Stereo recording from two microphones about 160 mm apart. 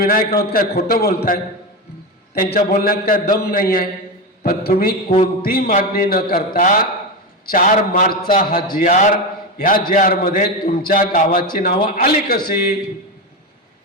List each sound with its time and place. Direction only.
0.0 s a man's voice: 65° left (ahead or behind)